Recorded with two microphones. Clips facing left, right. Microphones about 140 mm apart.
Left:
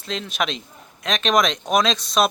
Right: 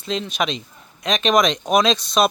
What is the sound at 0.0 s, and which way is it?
Speech, centre (ahead or behind).